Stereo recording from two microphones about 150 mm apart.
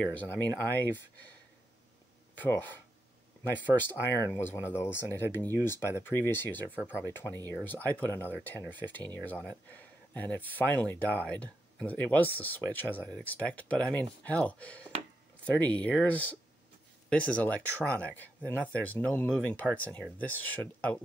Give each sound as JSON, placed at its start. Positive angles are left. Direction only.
{"t": 0.0, "sound": "speech", "side_deg": 10}
{"t": 2.3, "sound": "speech", "side_deg": 10}
{"t": 4.4, "sound": "speech", "side_deg": 15}